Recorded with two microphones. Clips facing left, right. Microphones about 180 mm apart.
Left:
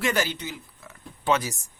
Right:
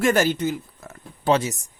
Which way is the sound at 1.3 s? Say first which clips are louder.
Right 5 dB; 25° right (ahead or behind).